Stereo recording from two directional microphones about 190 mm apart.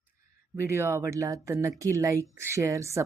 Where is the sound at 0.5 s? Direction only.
15° right (ahead or behind).